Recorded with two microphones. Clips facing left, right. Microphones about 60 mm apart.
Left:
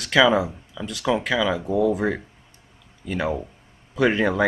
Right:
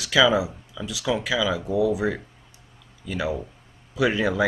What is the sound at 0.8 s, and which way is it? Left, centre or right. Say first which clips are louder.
Speech: left 1 dB; centre.